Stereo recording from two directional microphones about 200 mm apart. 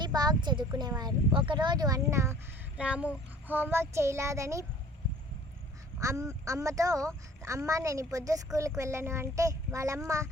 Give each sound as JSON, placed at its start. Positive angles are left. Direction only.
{"t": 0.0, "sound": "speech", "side_deg": -20}
{"t": 6.0, "sound": "speech", "side_deg": -15}